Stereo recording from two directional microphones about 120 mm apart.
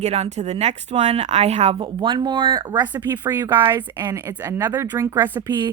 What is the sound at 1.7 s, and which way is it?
Speech, 40° right (ahead or behind).